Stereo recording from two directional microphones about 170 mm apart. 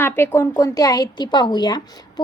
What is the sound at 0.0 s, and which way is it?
A woman's voice, 15° left (ahead or behind).